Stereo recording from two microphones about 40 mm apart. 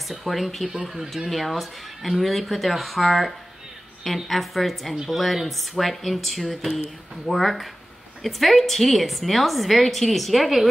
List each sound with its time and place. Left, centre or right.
0.1 s a woman's voice: centre